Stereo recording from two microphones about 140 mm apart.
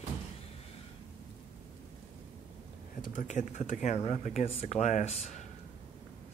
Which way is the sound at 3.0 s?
65° left (ahead or behind).